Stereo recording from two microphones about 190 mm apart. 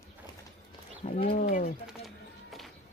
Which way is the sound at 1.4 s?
45° left (ahead or behind).